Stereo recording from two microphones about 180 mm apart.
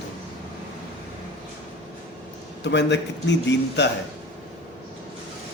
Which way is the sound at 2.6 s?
75° left (ahead or behind).